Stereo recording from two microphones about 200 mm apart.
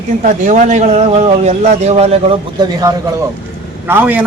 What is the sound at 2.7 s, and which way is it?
A man's voice, 20° right (ahead or behind).